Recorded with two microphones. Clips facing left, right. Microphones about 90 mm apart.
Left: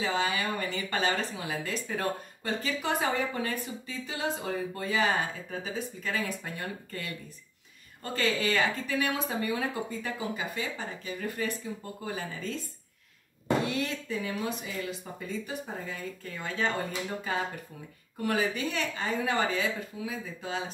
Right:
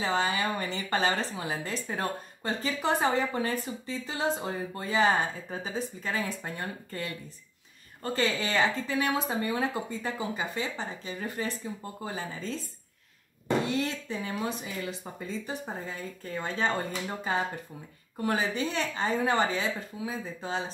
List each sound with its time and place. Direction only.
0.0 s speech: 35° right (ahead or behind)
13.7 s speech: 30° right (ahead or behind)
18.2 s speech: 25° right (ahead or behind)